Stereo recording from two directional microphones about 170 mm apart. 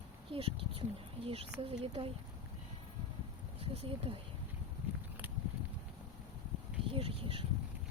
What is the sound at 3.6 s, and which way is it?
Speech, 35° right (ahead or behind).